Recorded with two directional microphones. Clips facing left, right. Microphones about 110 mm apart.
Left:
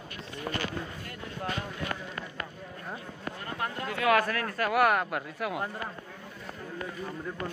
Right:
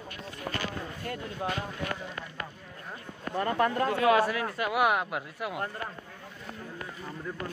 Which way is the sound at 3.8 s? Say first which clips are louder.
Even; 35° right (ahead or behind).